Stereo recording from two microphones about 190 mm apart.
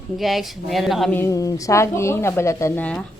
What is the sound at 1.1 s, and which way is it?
A woman's voice, 15° left (ahead or behind).